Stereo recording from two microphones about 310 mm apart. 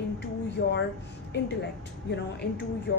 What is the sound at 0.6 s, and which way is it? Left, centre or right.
Speech, left.